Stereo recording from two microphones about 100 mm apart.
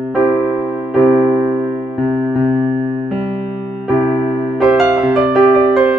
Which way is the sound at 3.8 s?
Centre (ahead or behind).